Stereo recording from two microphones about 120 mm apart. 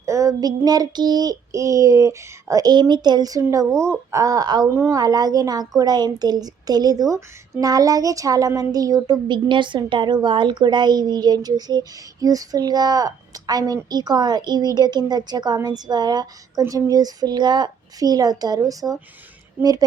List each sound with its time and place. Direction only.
0.0 s speech: 25° right (ahead or behind)
4.7 s speech: 25° right (ahead or behind)